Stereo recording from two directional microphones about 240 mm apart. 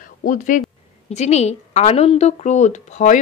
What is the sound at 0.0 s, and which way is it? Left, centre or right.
A woman's voice, left.